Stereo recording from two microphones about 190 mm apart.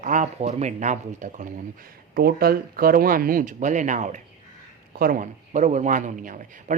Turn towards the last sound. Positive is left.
turn(degrees=-45)  # may be behind; listen again after turning